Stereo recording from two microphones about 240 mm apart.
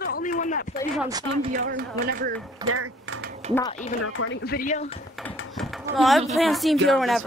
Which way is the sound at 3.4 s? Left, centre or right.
Right.